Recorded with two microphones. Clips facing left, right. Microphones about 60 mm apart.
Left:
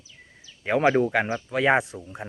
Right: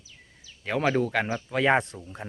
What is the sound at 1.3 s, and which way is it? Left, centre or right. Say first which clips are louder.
Speech: right 1 dB; centre.